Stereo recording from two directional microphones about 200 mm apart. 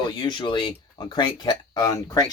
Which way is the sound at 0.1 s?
20° left (ahead or behind).